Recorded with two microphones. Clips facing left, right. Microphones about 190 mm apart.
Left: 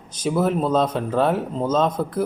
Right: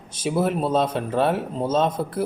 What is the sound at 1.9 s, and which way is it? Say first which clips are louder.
Speech: left 2 dB; 25° right (ahead or behind).